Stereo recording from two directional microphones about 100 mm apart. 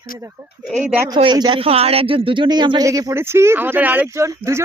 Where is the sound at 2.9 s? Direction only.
30° right (ahead or behind).